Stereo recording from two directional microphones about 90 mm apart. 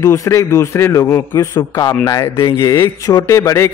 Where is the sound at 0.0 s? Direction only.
35° left (ahead or behind).